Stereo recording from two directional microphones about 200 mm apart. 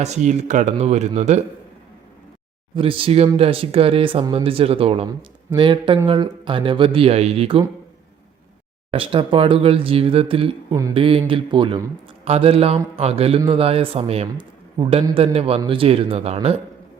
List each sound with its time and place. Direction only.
0.0 s speech: 35° right (ahead or behind)
2.7 s speech: 25° right (ahead or behind)
8.9 s speech: 25° right (ahead or behind)